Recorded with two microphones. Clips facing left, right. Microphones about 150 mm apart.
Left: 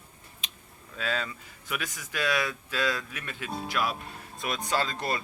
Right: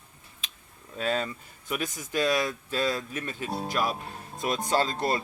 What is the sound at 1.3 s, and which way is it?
Speech, 30° right (ahead or behind).